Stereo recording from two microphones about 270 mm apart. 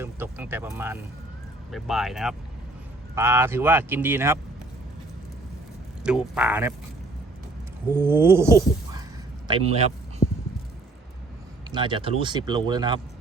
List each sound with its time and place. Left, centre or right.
0.0 s speech: centre
6.3 s speech: centre
7.9 s a man's voice: centre
11.7 s speech: centre